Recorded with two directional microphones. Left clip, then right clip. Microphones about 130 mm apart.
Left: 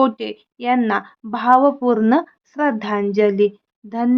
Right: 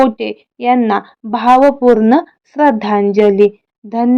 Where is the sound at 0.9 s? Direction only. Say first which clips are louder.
Right 6 dB; 30° right (ahead or behind).